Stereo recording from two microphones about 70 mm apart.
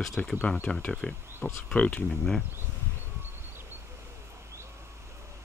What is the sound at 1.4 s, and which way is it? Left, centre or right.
Speech, centre.